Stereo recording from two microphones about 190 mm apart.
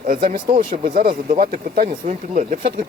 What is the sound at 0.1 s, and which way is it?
Speech, 40° right (ahead or behind).